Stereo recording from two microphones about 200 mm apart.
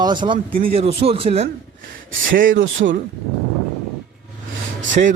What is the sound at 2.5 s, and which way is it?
Speech, 70° right (ahead or behind).